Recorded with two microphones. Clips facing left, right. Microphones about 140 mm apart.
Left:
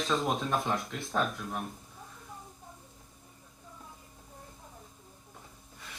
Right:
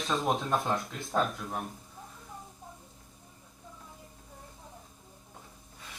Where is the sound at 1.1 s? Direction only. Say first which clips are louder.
Right 2 dB; 20° right (ahead or behind).